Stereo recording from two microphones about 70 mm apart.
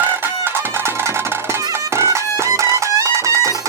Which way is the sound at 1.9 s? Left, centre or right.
Right.